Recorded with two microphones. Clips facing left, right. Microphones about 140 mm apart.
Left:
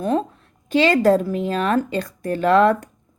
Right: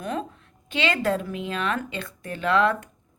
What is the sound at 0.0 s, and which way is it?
A woman's voice, 35° left (ahead or behind).